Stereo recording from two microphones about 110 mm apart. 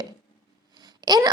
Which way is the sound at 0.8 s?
40° right (ahead or behind).